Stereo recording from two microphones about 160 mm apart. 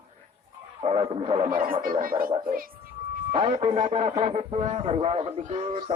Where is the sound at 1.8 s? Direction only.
60° right (ahead or behind).